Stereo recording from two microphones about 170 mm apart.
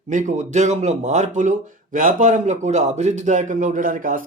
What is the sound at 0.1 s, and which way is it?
Speech, 45° right (ahead or behind).